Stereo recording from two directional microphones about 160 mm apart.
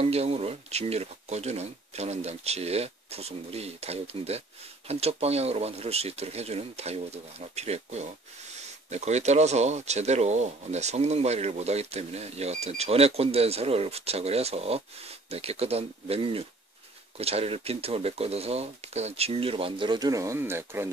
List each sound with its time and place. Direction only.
0.0 s speech: 40° right (ahead or behind); by 20.9 s 15° right (ahead or behind)